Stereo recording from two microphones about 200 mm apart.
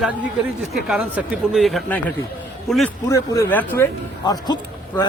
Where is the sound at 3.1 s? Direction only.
10° left (ahead or behind).